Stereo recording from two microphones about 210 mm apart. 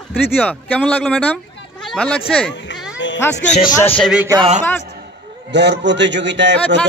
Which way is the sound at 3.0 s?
60° left (ahead or behind).